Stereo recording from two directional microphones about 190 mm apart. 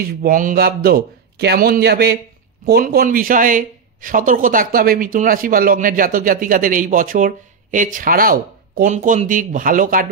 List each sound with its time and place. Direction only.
0.1 s speech: 50° right (ahead or behind)